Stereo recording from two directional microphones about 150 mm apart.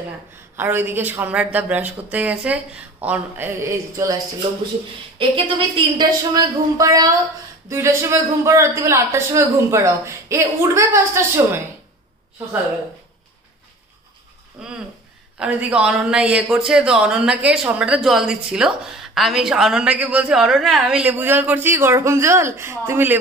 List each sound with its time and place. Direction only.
0.6 s speech: 15° right (ahead or behind)
5.9 s a man's voice: 25° right (ahead or behind)
14.6 s speech: 5° right (ahead or behind)